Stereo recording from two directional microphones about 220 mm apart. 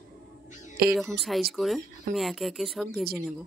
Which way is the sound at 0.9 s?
Centre (ahead or behind).